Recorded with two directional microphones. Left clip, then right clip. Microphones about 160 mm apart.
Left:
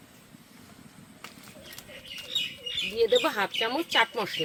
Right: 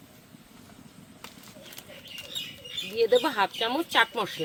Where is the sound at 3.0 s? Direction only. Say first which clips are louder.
Right 2 dB; 25° right (ahead or behind).